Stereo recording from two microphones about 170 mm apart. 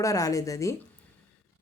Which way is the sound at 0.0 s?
20° left (ahead or behind).